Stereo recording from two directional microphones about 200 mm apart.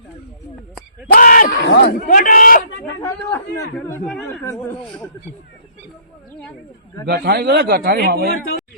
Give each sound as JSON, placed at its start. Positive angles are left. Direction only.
{"t": 1.1, "sound": "a sound", "side_deg": 45}
{"t": 1.8, "sound": "a man's voice", "side_deg": 45}
{"t": 3.0, "sound": "a man's voice", "side_deg": 10}
{"t": 7.1, "sound": "a man's voice", "side_deg": -55}